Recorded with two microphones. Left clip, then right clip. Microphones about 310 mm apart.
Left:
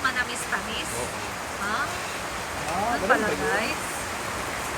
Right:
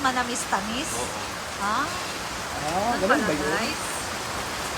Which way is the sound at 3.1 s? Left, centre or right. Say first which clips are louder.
Left 1 dB; centre.